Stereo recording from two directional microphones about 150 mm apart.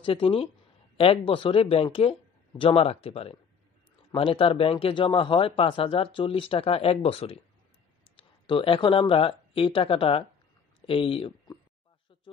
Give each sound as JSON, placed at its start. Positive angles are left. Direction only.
{"t": 0.0, "sound": "a man's voice", "side_deg": 40}